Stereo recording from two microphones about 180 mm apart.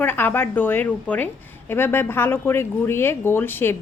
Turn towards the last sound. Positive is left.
turn(degrees=10)  # may be behind; listen again after turning